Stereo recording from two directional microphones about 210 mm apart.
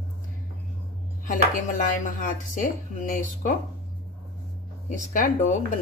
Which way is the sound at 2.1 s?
40° left (ahead or behind).